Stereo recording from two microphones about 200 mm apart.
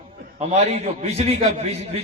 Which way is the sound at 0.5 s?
30° right (ahead or behind).